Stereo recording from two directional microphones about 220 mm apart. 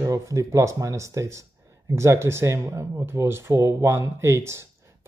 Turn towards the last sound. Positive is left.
turn(degrees=-10)  # may be behind; listen again after turning